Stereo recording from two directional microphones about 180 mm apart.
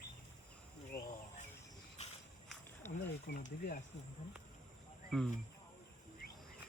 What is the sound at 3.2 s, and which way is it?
Speech, 60° left (ahead or behind).